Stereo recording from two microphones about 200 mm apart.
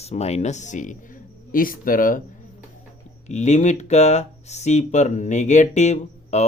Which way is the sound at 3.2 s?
35° left (ahead or behind).